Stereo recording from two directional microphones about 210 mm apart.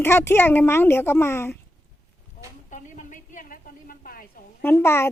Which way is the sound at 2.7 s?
35° left (ahead or behind).